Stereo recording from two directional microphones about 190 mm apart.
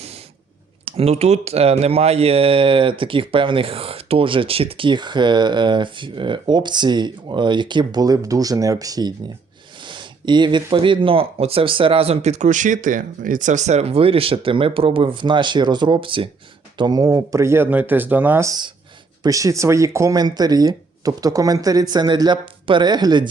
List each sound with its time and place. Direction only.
0.9 s speech: 30° right (ahead or behind)